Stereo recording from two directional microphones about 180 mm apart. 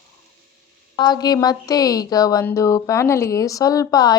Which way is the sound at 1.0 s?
25° left (ahead or behind).